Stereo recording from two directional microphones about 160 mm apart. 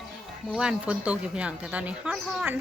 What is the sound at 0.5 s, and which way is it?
Speech, 5° right (ahead or behind).